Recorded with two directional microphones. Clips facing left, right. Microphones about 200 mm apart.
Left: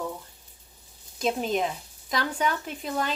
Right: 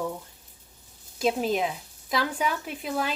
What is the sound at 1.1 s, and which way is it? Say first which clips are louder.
Speech: right 1 dB; 5° right (ahead or behind).